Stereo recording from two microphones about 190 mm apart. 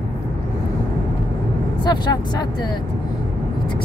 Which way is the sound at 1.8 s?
20° left (ahead or behind).